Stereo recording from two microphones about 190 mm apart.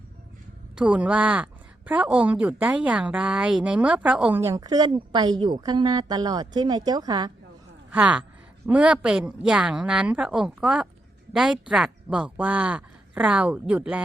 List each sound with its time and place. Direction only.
0.8 s a woman's voice: 5° right (ahead or behind)
7.9 s a woman's voice: 5° right (ahead or behind)